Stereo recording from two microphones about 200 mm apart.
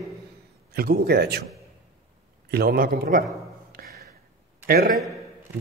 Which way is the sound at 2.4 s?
50° right (ahead or behind).